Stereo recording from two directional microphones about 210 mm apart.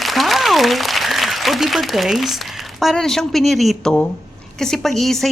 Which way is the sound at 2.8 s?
Centre (ahead or behind).